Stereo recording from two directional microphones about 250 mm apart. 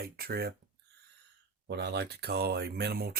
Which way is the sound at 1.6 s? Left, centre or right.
Right.